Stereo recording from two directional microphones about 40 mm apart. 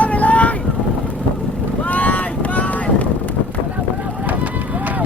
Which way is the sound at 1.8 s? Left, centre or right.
Left.